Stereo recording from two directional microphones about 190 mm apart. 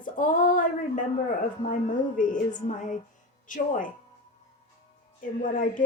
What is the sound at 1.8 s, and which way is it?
A woman's voice, 45° left (ahead or behind).